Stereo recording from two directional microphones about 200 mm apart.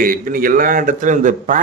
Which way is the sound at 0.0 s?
45° right (ahead or behind).